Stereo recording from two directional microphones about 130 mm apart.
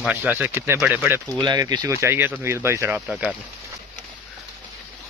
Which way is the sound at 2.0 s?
15° right (ahead or behind).